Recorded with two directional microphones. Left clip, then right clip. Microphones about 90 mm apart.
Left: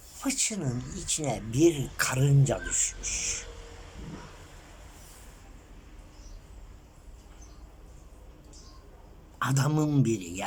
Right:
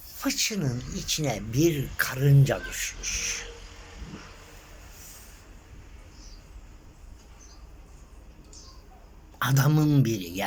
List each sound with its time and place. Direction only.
0.2 s speech: 10° left (ahead or behind)
9.4 s speech: 15° left (ahead or behind)